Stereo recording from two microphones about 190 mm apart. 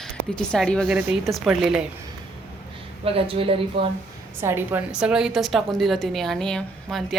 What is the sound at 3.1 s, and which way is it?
Speech, 30° right (ahead or behind).